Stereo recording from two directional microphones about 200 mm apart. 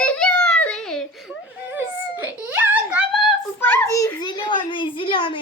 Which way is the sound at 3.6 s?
10° left (ahead or behind).